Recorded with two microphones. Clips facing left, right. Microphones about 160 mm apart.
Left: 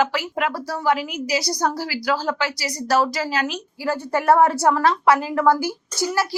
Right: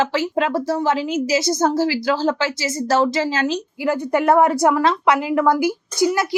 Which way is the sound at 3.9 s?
20° right (ahead or behind).